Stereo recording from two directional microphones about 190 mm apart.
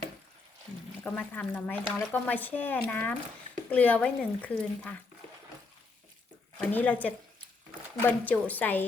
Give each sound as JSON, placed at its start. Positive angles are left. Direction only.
{"t": 1.0, "sound": "speech", "side_deg": 10}
{"t": 6.6, "sound": "speech", "side_deg": 10}